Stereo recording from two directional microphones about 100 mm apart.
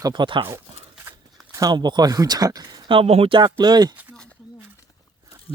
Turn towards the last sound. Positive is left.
turn(degrees=-45)  # may be behind; listen again after turning